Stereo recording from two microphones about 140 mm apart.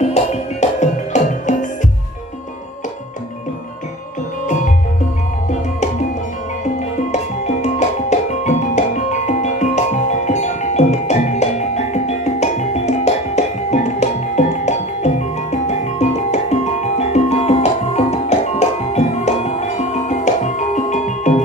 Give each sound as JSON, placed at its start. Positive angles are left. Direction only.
{"t": 0.0, "sound": "music", "side_deg": 55}
{"t": 7.6, "sound": "music", "side_deg": 55}